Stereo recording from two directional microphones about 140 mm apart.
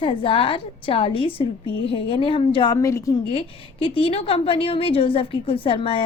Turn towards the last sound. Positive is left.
turn(degrees=40)  # may be behind; listen again after turning